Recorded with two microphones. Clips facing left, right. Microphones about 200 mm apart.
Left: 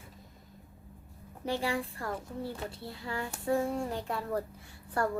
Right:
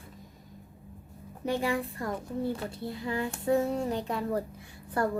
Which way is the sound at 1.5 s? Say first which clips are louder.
Right 3 dB; 20° right (ahead or behind).